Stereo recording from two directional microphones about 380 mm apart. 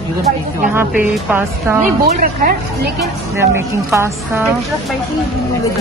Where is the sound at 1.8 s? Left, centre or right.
Right.